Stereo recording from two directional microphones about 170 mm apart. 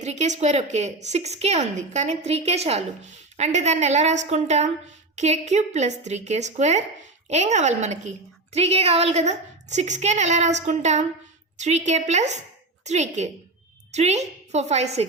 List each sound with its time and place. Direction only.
0.0 s a woman's voice: 45° right (ahead or behind)